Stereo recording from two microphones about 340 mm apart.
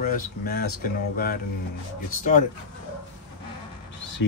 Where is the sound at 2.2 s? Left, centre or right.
Left.